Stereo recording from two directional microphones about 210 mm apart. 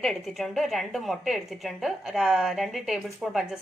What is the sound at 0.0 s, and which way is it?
A woman's voice, centre (ahead or behind).